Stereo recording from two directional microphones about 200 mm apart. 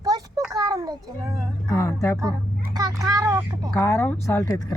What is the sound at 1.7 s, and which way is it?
Speech, 15° left (ahead or behind).